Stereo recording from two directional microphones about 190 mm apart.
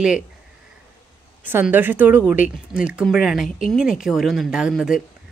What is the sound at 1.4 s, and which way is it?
A woman's voice, 10° right (ahead or behind).